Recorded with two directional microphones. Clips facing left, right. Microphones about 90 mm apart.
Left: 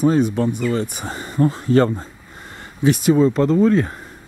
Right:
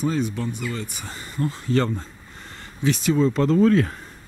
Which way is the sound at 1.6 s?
50° left (ahead or behind).